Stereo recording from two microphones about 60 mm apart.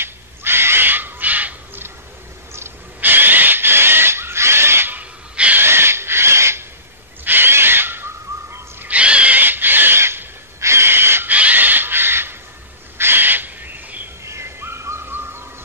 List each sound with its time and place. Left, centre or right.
0.0 s owl: right
3.0 s owl: right
5.3 s gasp: right
5.6 s a sound: right
7.2 s owl: right
8.8 s a sound: right
9.4 s a sound: right
11.2 s crow: right
12.9 s owl: right
14.2 s bird: right